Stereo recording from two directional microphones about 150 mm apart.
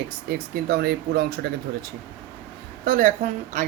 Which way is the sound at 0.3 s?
90° right.